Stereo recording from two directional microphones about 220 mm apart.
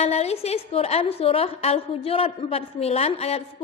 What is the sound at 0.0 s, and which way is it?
A woman's voice, 30° left (ahead or behind).